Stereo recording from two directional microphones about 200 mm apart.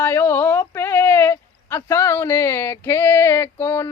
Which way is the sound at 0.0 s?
10° left (ahead or behind).